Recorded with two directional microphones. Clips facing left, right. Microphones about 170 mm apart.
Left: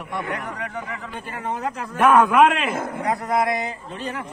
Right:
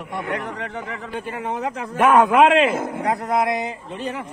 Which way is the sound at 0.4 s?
25° right (ahead or behind).